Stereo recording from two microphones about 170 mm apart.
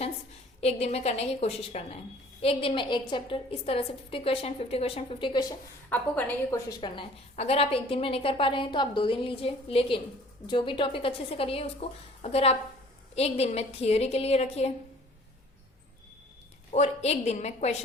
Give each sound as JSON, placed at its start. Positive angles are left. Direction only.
{"t": 0.6, "sound": "a woman's voice", "side_deg": 40}
{"t": 5.9, "sound": "a woman's voice", "side_deg": 10}
{"t": 6.7, "sound": "a woman's voice", "side_deg": 25}
{"t": 16.7, "sound": "a woman's voice", "side_deg": 40}